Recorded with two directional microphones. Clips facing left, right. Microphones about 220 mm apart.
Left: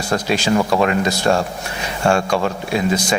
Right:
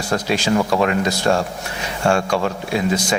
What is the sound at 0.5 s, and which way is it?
Speech, 30° left (ahead or behind).